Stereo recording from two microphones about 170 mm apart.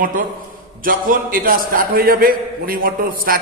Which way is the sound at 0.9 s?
55° right (ahead or behind).